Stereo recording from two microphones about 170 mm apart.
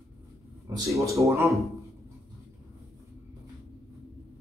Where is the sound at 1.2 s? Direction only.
15° right (ahead or behind).